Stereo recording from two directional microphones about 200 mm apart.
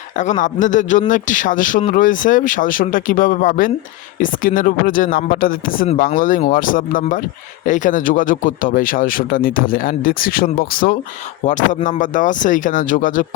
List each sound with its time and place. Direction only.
0.2 s speech: 40° left (ahead or behind)